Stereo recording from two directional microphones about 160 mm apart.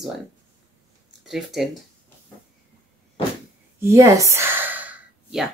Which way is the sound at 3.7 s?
15° right (ahead or behind).